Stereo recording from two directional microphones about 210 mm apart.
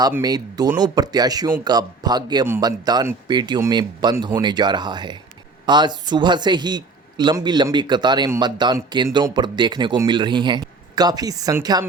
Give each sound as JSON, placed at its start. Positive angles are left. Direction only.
{"t": 0.0, "sound": "a man's voice", "side_deg": -15}